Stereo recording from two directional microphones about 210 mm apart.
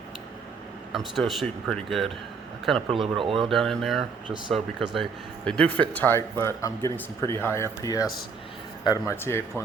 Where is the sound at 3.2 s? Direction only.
25° right (ahead or behind).